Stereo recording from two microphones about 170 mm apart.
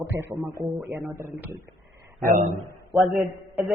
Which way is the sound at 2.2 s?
50° right (ahead or behind).